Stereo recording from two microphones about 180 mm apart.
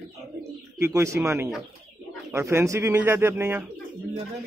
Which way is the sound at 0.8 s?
15° right (ahead or behind).